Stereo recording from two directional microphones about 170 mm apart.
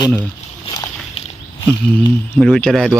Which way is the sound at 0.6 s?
25° left (ahead or behind).